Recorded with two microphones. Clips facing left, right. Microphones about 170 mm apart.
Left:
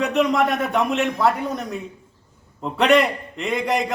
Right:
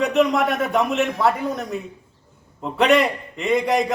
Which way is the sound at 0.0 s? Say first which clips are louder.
Right 1 dB; centre (ahead or behind).